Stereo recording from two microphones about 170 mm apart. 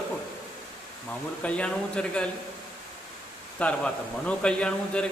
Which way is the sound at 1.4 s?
5° left (ahead or behind).